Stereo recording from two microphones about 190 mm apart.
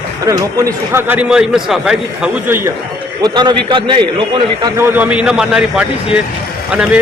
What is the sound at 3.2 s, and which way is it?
A man's voice, 20° right (ahead or behind).